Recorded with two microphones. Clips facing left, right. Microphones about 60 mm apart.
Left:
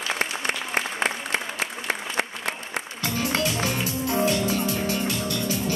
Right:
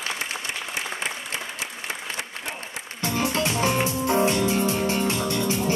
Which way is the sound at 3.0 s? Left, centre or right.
Right.